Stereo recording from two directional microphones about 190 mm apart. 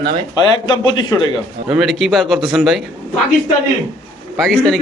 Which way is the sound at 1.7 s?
Centre (ahead or behind).